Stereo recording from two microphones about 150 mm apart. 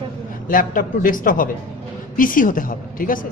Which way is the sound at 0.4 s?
65° left (ahead or behind).